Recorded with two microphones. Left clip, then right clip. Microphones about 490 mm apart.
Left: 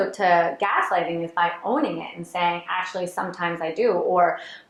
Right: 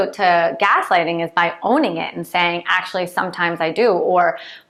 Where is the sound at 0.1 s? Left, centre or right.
Right.